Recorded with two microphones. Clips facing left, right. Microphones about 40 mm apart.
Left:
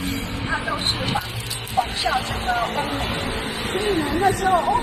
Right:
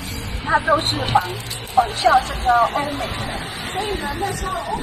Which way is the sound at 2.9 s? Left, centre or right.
Left.